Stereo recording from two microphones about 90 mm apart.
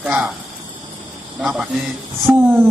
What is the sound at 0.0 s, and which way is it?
Speech, 10° right (ahead or behind).